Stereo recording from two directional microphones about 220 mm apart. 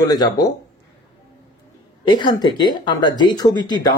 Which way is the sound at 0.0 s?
15° left (ahead or behind).